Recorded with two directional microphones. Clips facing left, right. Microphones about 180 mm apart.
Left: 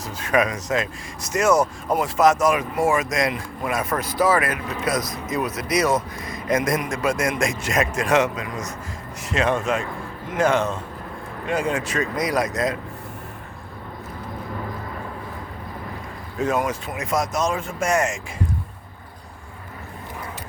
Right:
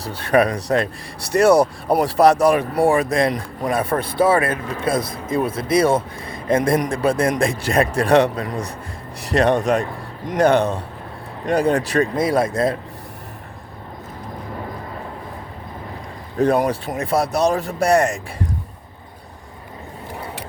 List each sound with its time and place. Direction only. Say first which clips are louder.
0.0 s speech: right 4 dB; 35° right (ahead or behind)
16.4 s speech: right 6 dB; 35° right (ahead or behind)